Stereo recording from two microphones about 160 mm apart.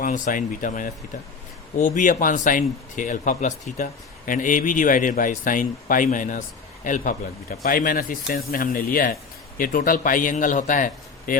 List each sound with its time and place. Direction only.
0.0 s speech: 55° left (ahead or behind)